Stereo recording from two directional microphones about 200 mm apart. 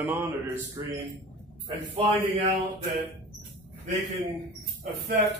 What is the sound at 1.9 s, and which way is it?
Speech, 25° right (ahead or behind).